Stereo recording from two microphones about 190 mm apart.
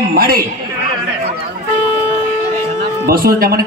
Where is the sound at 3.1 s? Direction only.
50° right (ahead or behind).